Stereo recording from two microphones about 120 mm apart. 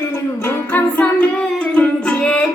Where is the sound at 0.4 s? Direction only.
15° left (ahead or behind).